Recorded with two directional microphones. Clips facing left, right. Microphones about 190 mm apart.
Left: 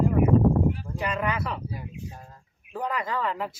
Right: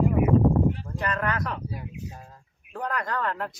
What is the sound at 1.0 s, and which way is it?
Speech, 5° left (ahead or behind).